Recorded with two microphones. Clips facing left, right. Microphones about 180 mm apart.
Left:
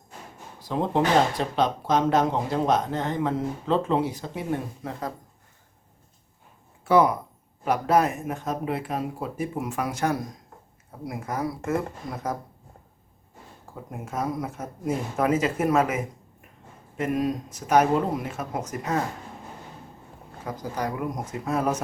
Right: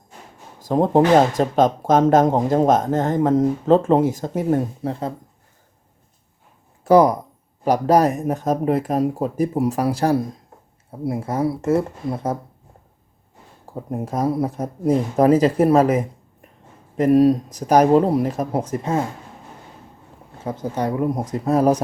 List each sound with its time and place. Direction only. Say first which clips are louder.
0.6 s speech: right 8 dB; 45° right (ahead or behind)
6.8 s speech: right 6 dB; 40° right (ahead or behind)
13.9 s speech: right 8 dB; 35° right (ahead or behind)
20.4 s speech: right 6 dB; 25° right (ahead or behind)